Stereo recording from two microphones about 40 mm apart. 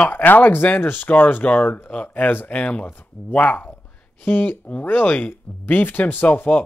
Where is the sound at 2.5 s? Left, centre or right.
Left.